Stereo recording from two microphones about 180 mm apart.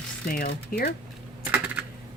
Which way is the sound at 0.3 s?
55° left (ahead or behind).